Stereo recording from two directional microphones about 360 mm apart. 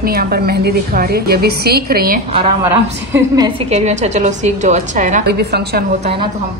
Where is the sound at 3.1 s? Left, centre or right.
Centre; by 6.1 s right.